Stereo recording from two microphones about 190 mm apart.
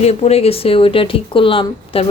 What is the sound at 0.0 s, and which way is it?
A woman's voice, 35° left (ahead or behind).